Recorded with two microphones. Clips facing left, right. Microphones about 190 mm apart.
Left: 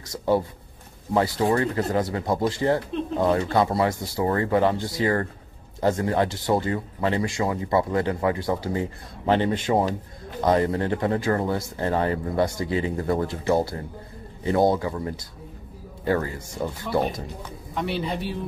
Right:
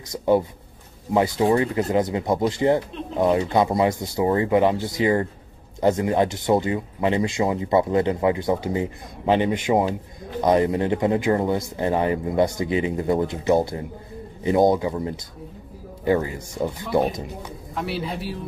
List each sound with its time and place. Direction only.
0.1 s speech: 20° right (ahead or behind)
17.7 s a man's voice: 5° right (ahead or behind)